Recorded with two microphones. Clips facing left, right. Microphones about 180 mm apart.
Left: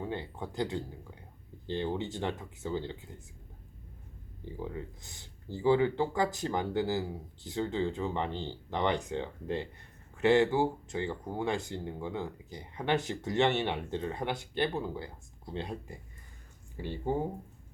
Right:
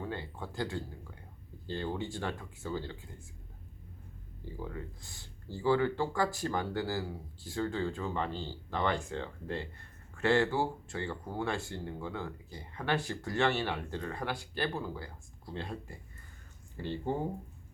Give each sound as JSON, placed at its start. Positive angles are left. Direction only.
{"t": 0.0, "sound": "speech", "side_deg": 20}
{"t": 4.4, "sound": "speech", "side_deg": 20}